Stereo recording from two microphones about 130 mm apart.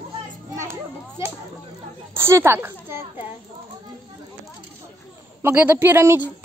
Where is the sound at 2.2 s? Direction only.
20° right (ahead or behind).